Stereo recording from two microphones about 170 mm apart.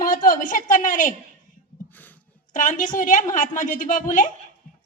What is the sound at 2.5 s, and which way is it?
A woman's voice, 50° left (ahead or behind).